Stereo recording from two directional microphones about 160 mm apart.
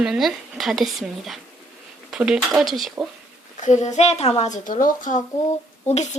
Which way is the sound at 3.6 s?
45° left (ahead or behind).